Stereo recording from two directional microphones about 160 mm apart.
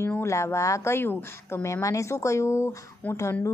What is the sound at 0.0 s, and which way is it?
A woman's voice, 15° left (ahead or behind).